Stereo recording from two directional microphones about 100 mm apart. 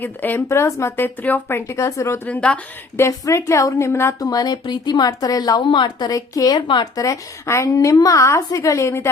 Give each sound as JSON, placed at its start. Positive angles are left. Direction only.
{"t": 0.0, "sound": "speech", "side_deg": 20}
{"t": 2.2, "sound": "a woman's voice", "side_deg": 15}
{"t": 3.1, "sound": "speech", "side_deg": 35}
{"t": 4.3, "sound": "a woman's voice", "side_deg": 40}
{"t": 5.6, "sound": "a woman's voice", "side_deg": 50}
{"t": 6.1, "sound": "a woman's voice", "side_deg": 35}
{"t": 6.6, "sound": "speech", "side_deg": 55}
{"t": 6.9, "sound": "a woman's voice", "side_deg": 30}